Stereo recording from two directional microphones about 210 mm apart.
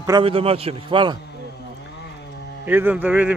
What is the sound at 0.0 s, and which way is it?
A man's voice, 20° right (ahead or behind).